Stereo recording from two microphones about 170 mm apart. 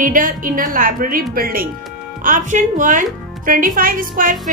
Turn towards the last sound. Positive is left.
turn(degrees=-55)  # may be behind; listen again after turning